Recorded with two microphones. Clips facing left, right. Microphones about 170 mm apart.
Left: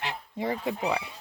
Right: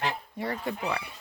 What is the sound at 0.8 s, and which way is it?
Speech, 25° left (ahead or behind).